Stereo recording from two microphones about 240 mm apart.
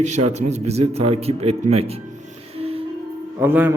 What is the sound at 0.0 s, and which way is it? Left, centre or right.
A man's voice, right.